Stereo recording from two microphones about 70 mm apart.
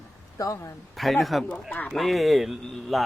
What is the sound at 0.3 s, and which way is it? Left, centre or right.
Speech, left.